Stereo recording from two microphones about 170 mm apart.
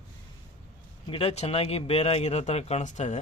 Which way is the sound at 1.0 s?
30° left (ahead or behind).